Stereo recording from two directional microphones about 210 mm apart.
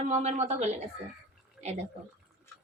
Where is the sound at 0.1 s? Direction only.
30° right (ahead or behind).